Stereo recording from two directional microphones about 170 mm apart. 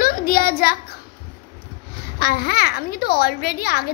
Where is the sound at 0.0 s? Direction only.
60° left (ahead or behind).